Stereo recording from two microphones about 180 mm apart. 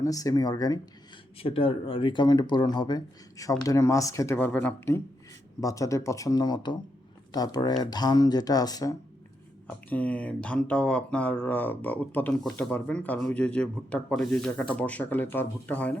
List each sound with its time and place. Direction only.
0.0 s speech: 20° left (ahead or behind)
9.6 s speech: 10° left (ahead or behind)